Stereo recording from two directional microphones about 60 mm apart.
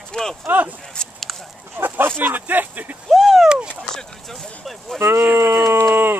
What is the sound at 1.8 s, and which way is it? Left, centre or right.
Speech, right.